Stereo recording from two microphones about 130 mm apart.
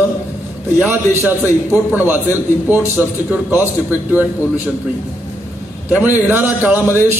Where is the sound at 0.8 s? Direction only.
15° right (ahead or behind).